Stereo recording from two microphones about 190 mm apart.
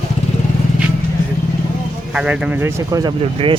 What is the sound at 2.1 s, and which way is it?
Speech, 5° right (ahead or behind).